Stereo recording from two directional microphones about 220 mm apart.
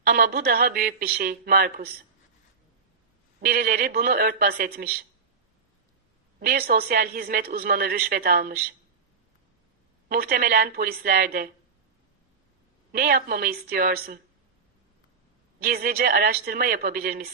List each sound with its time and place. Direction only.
0.0 s a woman's voice: 45° right (ahead or behind)
3.4 s a woman's voice: 45° right (ahead or behind)
6.4 s a woman's voice: 45° right (ahead or behind)
10.1 s a woman's voice: 45° right (ahead or behind)
12.9 s a woman's voice: 45° right (ahead or behind)
15.6 s a woman's voice: 45° right (ahead or behind)